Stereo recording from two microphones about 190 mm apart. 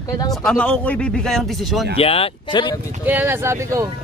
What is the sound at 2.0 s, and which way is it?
Speech, 30° left (ahead or behind).